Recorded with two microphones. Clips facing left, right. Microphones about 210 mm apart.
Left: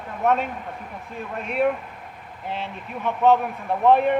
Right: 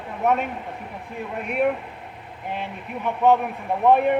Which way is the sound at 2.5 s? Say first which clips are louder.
Right 1 dB; 15° right (ahead or behind).